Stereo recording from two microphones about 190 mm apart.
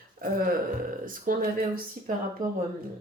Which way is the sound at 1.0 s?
45° right (ahead or behind).